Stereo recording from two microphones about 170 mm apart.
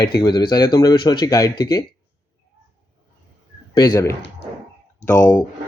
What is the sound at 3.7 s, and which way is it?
Speech, 25° left (ahead or behind).